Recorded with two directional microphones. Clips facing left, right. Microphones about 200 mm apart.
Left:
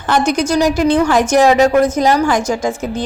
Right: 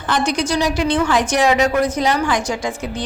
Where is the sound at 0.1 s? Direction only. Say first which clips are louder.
Left 5 dB; 45° left (ahead or behind).